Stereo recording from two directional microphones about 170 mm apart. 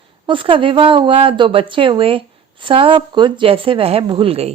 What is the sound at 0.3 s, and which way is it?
Speech, 30° right (ahead or behind).